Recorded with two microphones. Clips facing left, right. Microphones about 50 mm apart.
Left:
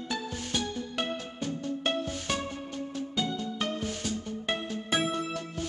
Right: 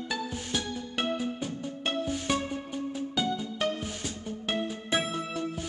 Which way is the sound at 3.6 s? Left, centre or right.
Centre.